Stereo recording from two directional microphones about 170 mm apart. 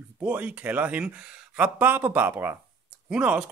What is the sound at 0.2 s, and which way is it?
Speech, 10° right (ahead or behind).